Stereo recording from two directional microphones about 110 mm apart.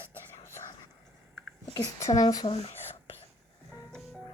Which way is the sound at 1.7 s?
35° left (ahead or behind).